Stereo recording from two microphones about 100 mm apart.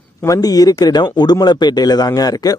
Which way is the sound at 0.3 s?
40° left (ahead or behind).